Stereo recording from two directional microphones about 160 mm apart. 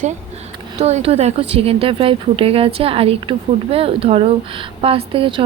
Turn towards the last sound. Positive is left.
turn(degrees=-35)  # may be behind; listen again after turning